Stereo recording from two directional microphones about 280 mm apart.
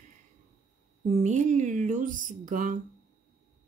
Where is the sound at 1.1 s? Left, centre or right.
Right.